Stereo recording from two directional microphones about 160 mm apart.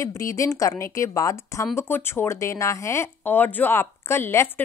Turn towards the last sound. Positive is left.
turn(degrees=15)  # may be behind; listen again after turning